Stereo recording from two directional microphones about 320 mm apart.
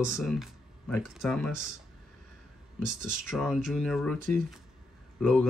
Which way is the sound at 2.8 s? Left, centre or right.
Centre.